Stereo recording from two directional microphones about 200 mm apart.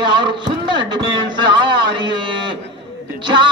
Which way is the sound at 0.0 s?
25° right (ahead or behind).